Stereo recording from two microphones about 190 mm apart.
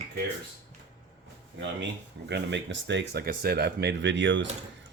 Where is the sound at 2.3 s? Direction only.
65° right (ahead or behind).